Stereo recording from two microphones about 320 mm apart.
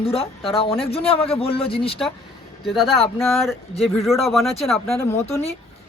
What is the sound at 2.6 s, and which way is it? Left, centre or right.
Speech, centre.